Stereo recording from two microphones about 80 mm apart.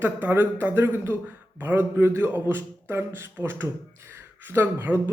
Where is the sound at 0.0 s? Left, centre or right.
Right.